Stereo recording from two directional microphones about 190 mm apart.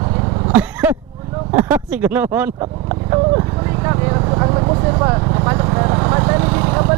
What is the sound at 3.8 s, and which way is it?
Vehicle, 20° right (ahead or behind).